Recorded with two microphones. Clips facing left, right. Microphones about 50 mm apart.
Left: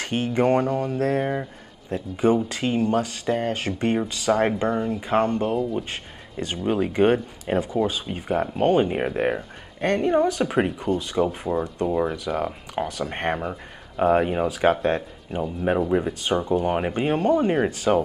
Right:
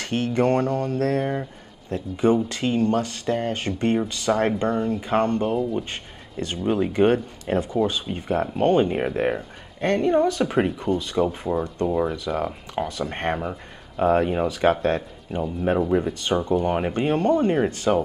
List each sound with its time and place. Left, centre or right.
0.0 s speech: left
5.5 s speech: centre
6.6 s speech: centre
7.7 s speech: centre